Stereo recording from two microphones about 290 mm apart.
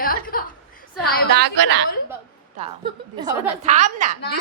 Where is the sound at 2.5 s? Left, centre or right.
Centre.